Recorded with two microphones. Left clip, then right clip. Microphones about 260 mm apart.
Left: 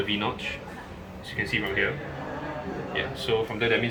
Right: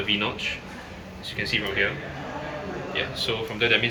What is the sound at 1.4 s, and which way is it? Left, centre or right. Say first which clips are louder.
Speech: right 1 dB; centre.